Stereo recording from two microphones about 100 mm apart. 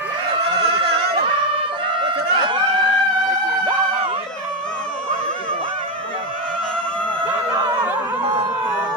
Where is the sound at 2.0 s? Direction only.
55° right (ahead or behind).